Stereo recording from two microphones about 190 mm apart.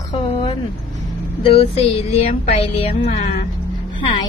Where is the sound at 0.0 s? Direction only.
35° left (ahead or behind).